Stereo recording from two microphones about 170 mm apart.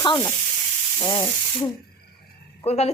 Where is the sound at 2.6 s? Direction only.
40° left (ahead or behind).